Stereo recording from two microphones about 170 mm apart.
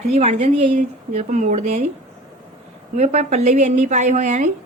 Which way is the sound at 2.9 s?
40° right (ahead or behind).